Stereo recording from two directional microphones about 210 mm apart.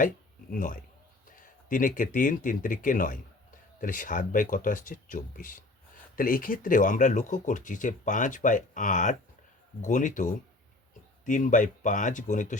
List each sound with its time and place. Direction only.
0.5 s speech: 40° left (ahead or behind)